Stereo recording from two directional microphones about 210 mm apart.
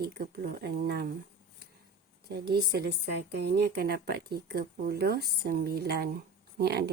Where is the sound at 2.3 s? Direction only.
50° right (ahead or behind).